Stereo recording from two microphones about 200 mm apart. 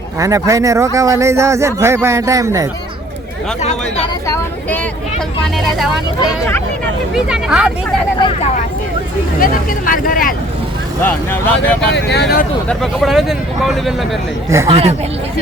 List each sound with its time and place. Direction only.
0.2 s speech: 15° right (ahead or behind)
3.6 s speech: 30° left (ahead or behind)
4.3 s vehicle: 10° left (ahead or behind)
5.5 s speech: centre (ahead or behind)
7.3 s speech: 5° right (ahead or behind)
9.4 s speech: 45° left (ahead or behind)
11.0 s speech: 10° left (ahead or behind)
11.9 s speech: 60° left (ahead or behind)
12.6 s speech: centre (ahead or behind)
14.7 s speech: 30° right (ahead or behind)